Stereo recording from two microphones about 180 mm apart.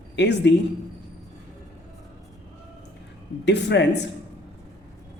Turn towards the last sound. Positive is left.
turn(degrees=75)  # may be behind; listen again after turning